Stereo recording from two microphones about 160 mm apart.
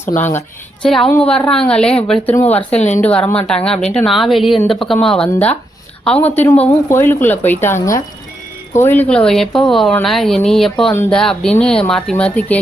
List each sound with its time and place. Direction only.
0.3 s a woman's voice: 5° left (ahead or behind)
2.6 s speech: 45° left (ahead or behind)
3.0 s a woman's voice: 10° left (ahead or behind)